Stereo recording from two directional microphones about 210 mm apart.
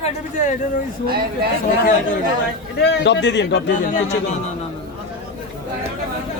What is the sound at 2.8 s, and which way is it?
Speech, 55° left (ahead or behind).